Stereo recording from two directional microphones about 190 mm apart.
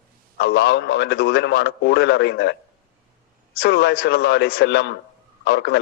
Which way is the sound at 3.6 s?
60° left (ahead or behind).